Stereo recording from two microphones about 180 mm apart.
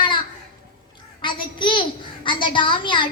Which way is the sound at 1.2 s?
25° left (ahead or behind).